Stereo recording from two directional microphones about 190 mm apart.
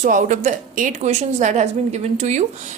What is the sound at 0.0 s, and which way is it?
A woman's voice, 40° right (ahead or behind).